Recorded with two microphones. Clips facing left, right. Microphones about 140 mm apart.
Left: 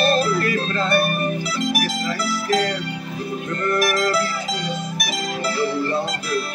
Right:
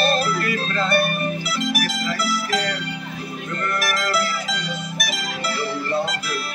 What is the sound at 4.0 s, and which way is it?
Mandolin, 45° left (ahead or behind).